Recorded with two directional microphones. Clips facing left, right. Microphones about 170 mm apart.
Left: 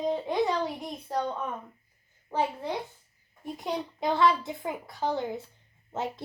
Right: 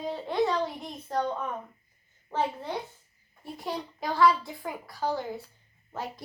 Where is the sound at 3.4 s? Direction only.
20° left (ahead or behind).